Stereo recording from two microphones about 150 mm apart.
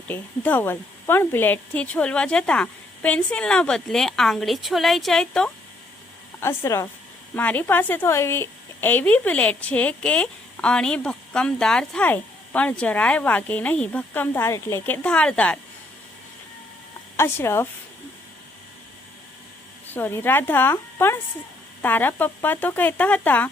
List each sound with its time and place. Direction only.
0.1 s speech: 10° left (ahead or behind)
6.4 s a woman's voice: 15° left (ahead or behind)
17.2 s a woman's voice: 15° left (ahead or behind)
19.9 s a woman's voice: 15° left (ahead or behind)